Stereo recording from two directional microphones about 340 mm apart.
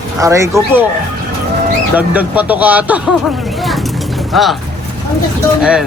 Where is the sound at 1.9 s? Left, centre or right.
Centre.